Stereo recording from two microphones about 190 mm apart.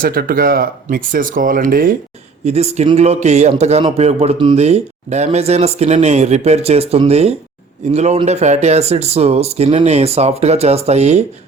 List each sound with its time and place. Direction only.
0.0 s speech: 50° right (ahead or behind)
2.4 s speech: 35° right (ahead or behind)